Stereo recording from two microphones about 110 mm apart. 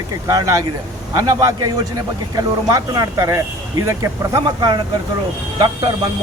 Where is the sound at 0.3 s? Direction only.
30° right (ahead or behind).